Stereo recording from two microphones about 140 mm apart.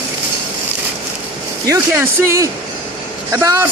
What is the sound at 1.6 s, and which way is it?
Speech, 20° right (ahead or behind).